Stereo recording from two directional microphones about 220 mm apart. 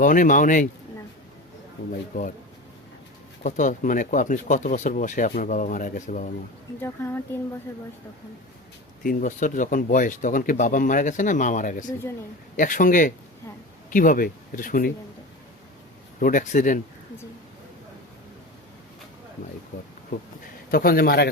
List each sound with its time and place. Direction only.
0.0 s speech: 35° left (ahead or behind)
3.4 s speech: 35° left (ahead or behind)
6.8 s speech: 10° left (ahead or behind)
9.0 s speech: 35° left (ahead or behind)
16.2 s speech: 35° left (ahead or behind)
20.7 s a man's voice: 40° left (ahead or behind)